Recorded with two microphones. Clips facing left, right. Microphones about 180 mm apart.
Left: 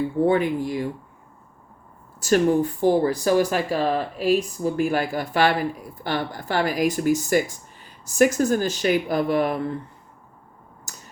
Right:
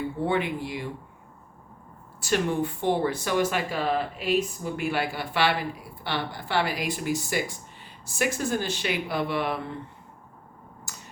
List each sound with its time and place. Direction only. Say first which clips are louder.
0.3 s speech: left 5 dB; 40° left (ahead or behind)
2.2 s speech: left 7 dB; 40° left (ahead or behind)
10.9 s tick-tock: left 2 dB; 45° left (ahead or behind)